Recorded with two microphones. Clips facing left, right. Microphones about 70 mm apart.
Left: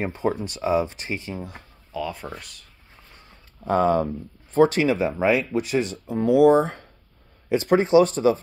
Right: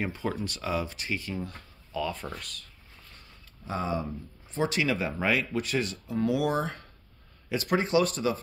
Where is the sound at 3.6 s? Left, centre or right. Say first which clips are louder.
Left 11 dB; left.